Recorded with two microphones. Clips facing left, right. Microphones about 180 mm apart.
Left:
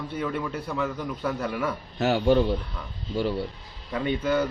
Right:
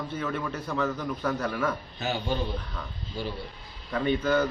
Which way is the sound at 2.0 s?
75° left (ahead or behind).